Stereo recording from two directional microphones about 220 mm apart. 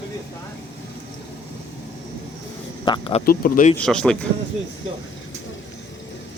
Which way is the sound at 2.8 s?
25° left (ahead or behind).